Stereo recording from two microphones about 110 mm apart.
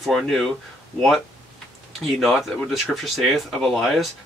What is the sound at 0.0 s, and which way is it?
Speech, centre (ahead or behind).